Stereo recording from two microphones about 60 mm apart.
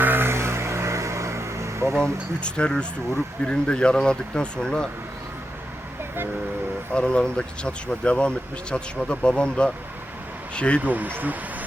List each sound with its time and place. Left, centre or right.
0.0 s vehicle: right
2.4 s speech: centre
6.9 s speech: centre
10.8 s speech: right